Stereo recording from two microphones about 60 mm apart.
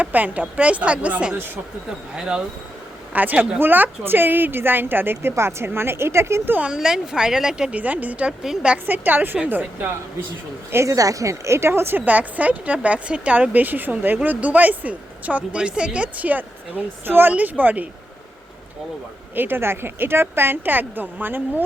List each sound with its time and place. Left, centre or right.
0.0 s speech: right; by 2.4 s centre
3.1 s a woman's voice: right
6.7 s speech: centre
7.7 s speech: right
10.8 s a woman's voice: right
12.0 s speech: right
19.3 s speech: right